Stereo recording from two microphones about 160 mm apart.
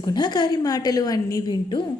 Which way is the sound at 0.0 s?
25° left (ahead or behind).